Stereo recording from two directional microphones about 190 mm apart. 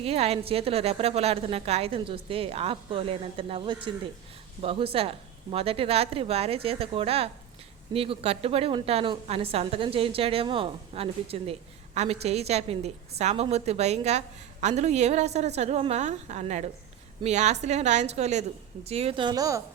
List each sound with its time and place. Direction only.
0.0 s a woman's voice: 35° right (ahead or behind)